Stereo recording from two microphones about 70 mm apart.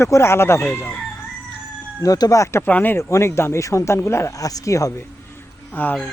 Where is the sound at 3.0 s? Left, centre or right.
Left.